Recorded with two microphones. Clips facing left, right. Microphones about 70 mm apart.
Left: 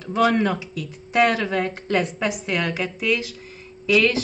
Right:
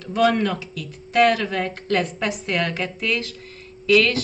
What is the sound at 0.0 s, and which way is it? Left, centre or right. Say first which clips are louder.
A woman's voice: even; centre.